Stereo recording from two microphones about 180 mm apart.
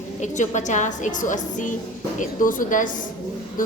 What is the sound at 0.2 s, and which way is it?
A woman's voice, 45° left (ahead or behind).